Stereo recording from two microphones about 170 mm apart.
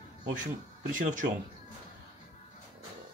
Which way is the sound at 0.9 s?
50° right (ahead or behind).